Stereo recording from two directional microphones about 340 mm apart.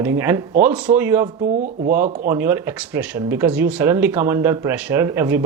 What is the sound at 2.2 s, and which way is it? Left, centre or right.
Speech, centre.